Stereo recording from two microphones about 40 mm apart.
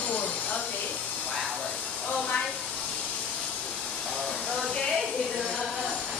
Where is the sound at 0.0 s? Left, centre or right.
Left.